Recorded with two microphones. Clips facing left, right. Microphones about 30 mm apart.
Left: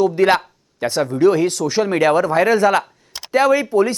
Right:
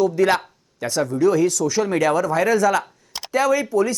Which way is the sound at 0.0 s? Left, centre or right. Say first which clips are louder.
Left 3 dB; left.